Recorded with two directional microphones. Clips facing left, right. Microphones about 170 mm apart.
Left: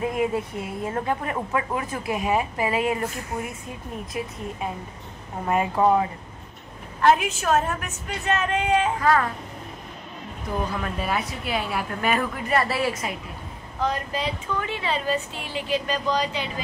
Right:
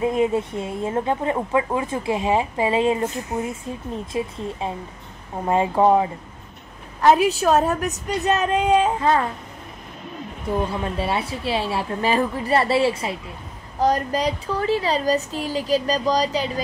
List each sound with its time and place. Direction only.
0.0 s a woman's voice: 25° right (ahead or behind)
7.2 s a woman's voice: 35° right (ahead or behind)
9.0 s a woman's voice: 25° right (ahead or behind)
10.7 s a woman's voice: 30° right (ahead or behind)
13.7 s a woman's voice: 40° right (ahead or behind)